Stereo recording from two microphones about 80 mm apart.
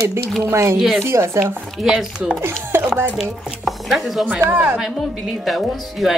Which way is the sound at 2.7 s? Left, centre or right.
Right.